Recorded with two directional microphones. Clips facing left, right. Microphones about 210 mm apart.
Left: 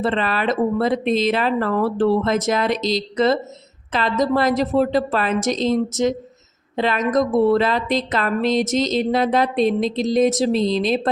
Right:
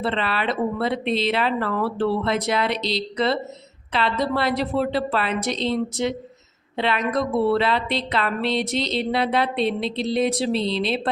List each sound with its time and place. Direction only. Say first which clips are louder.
0.0 s a woman's voice: left 4 dB; 45° left (ahead or behind)